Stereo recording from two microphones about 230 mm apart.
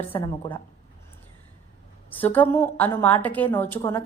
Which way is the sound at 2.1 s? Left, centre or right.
Centre.